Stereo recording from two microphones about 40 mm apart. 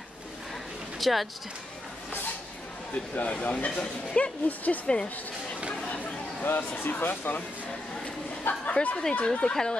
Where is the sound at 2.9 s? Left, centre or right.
Left.